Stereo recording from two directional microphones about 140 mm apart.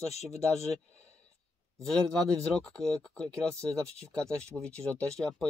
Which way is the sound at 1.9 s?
5° left (ahead or behind).